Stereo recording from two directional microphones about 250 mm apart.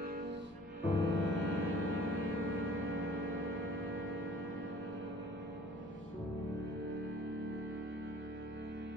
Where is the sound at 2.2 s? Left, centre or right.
Right.